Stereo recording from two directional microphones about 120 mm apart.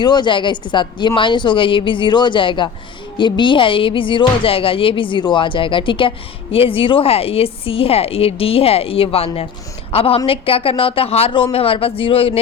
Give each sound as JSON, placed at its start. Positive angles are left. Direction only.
{"t": 0.0, "sound": "a woman's voice", "side_deg": 40}